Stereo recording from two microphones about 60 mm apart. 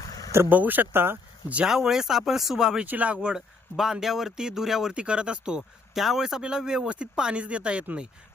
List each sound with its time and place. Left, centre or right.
0.5 s speech: right
1.6 s speech: centre
2.8 s speech: right
3.2 s a man's voice: centre
4.9 s speech: centre